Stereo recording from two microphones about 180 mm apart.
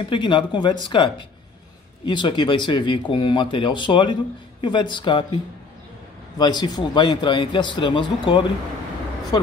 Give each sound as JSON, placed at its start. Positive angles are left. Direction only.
{"t": 0.1, "sound": "speech", "side_deg": 25}